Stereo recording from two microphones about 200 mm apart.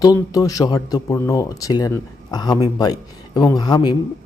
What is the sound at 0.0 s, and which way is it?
Speech, 20° left (ahead or behind).